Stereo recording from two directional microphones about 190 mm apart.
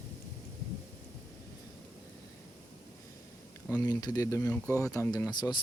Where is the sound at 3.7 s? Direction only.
20° left (ahead or behind).